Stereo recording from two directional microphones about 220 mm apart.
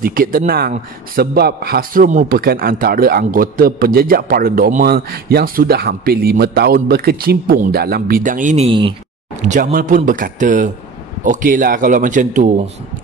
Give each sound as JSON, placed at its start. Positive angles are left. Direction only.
{"t": 0.0, "sound": "a man's voice", "side_deg": -40}
{"t": 9.5, "sound": "speech", "side_deg": -40}